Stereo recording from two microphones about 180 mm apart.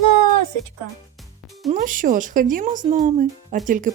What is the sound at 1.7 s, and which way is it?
Speech, 50° right (ahead or behind).